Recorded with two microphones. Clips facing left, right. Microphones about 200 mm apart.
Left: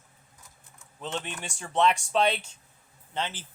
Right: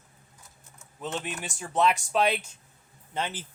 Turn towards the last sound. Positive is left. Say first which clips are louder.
# right 1 dB
turn(degrees=-15)  # may be behind; listen again after turning